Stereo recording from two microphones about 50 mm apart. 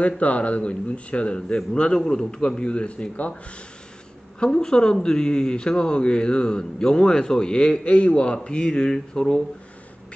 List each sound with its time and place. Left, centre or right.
0.0 s speech: left
4.4 s speech: centre